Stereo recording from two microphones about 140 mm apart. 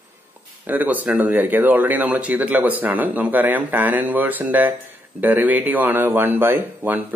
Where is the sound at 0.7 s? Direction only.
10° right (ahead or behind).